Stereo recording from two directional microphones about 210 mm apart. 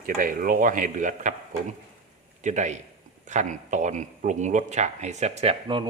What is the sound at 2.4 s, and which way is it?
A man's voice, 35° right (ahead or behind).